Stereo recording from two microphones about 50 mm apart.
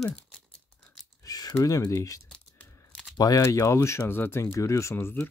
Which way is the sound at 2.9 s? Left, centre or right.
Centre.